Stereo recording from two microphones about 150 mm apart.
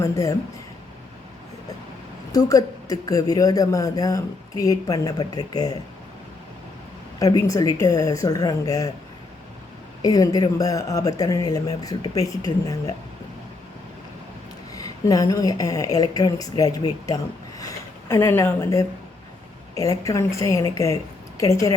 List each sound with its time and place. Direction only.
0.0 s speech: 20° left (ahead or behind)
2.3 s speech: 25° left (ahead or behind)
7.2 s speech: 25° left (ahead or behind)
10.0 s speech: 25° left (ahead or behind)
14.7 s speech: 25° left (ahead or behind)
17.6 s a sound: 20° left (ahead or behind)
19.7 s speech: 20° left (ahead or behind)